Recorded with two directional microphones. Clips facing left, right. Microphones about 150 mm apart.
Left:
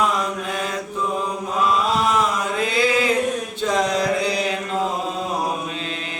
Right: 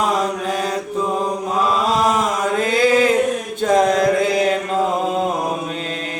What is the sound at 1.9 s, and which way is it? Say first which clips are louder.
Chant: right 2 dB; 40° right (ahead or behind).